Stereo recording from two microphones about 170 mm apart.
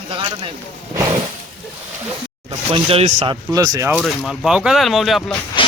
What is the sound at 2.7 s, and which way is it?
Speech, 35° right (ahead or behind).